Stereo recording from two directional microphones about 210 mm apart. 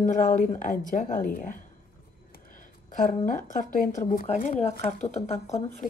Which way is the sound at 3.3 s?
40° left (ahead or behind).